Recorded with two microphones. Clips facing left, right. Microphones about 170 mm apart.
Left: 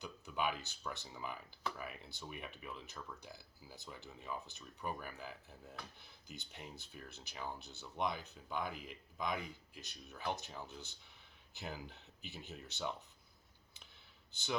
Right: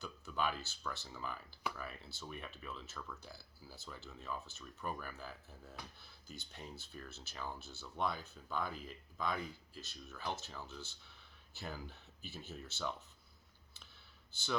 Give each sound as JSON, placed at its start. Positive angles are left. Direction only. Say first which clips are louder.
{"t": 0.0, "sound": "speech", "louder": "even", "side_deg": 15}